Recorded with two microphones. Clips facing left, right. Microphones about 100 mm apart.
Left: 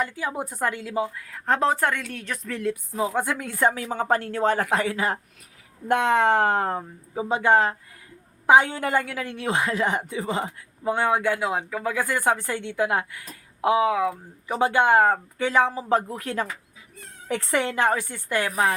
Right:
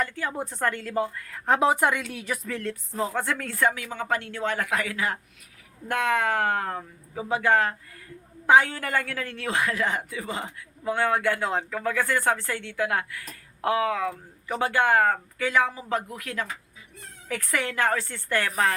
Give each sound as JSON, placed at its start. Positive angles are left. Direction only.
{"t": 0.0, "sound": "a woman's voice", "side_deg": 15}
{"t": 2.6, "sound": "a woman's voice", "side_deg": 10}
{"t": 3.7, "sound": "a woman's voice", "side_deg": 30}